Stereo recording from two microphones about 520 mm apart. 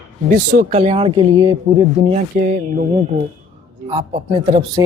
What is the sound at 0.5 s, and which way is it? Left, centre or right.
Speech, centre.